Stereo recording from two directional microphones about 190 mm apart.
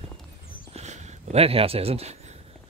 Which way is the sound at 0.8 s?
35° right (ahead or behind).